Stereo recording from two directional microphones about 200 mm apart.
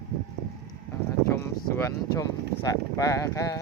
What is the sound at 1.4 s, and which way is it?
Speech, 15° left (ahead or behind).